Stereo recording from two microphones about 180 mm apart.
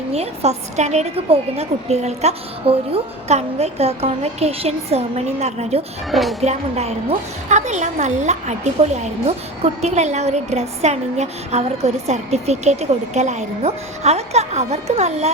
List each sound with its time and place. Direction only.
0.1 s a woman's voice: 35° right (ahead or behind)
6.1 s music: centre (ahead or behind)
6.4 s a woman's voice: 35° right (ahead or behind)